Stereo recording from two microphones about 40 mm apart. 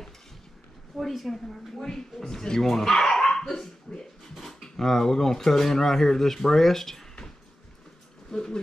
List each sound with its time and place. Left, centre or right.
0.9 s speech: centre
8.3 s speech: centre